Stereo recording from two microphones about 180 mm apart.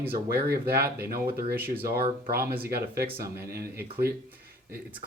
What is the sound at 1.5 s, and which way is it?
Speech, 10° right (ahead or behind).